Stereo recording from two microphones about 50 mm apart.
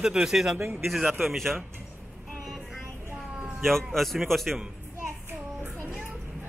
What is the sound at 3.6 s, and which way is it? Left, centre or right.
A man's voice, centre.